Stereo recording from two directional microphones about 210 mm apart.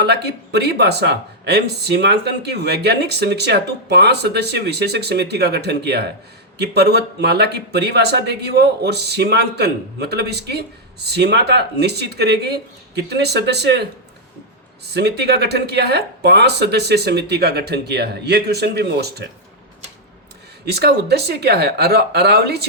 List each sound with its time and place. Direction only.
0.0 s speech: 50° right (ahead or behind)
14.9 s speech: 50° right (ahead or behind)
20.7 s speech: 50° right (ahead or behind)